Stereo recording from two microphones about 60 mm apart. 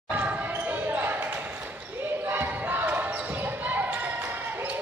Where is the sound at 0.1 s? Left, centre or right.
Right.